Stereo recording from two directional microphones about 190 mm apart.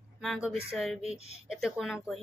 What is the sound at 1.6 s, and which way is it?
Speech, centre (ahead or behind).